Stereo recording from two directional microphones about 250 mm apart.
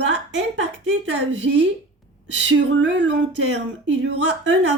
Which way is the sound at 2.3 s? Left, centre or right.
Right.